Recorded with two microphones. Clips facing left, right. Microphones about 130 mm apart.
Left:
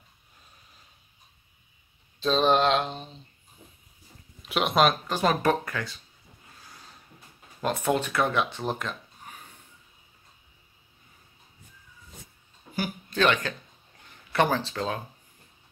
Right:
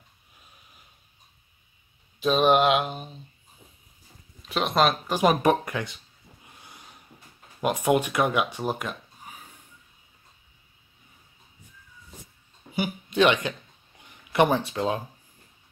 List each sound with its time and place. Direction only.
2.1 s speech: 10° right (ahead or behind)
4.5 s speech: centre (ahead or behind); by 5.9 s 20° right (ahead or behind)
6.4 s a sound: 20° right (ahead or behind)
7.6 s speech: 15° right (ahead or behind)
13.1 s speech: 15° right (ahead or behind)